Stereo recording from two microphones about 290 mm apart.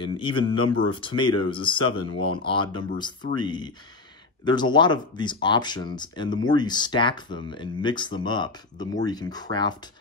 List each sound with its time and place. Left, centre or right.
0.0 s speech: centre